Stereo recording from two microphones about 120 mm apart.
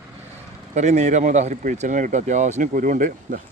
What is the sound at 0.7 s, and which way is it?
Speech, 75° right (ahead or behind).